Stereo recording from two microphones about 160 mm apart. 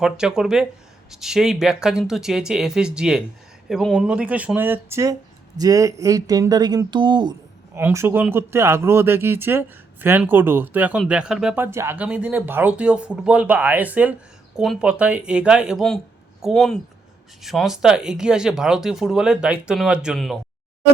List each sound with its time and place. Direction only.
0.0 s speech: 5° right (ahead or behind); by 7.3 s 30° right (ahead or behind)
7.8 s speech: 15° right (ahead or behind)